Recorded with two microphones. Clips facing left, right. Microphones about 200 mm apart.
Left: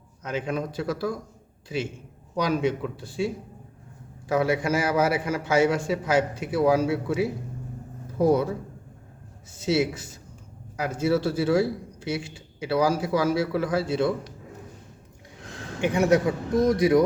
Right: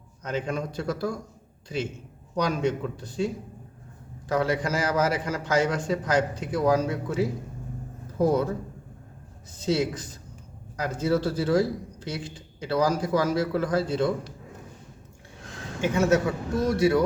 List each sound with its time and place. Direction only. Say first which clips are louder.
0.2 s a man's voice: left 1 dB; 5° left (ahead or behind)
2.3 s a man's voice: left 1 dB; 5° left (ahead or behind)
9.6 s a man's voice: left 1 dB; 5° left (ahead or behind)
15.8 s a man's voice: left 1 dB; 15° left (ahead or behind)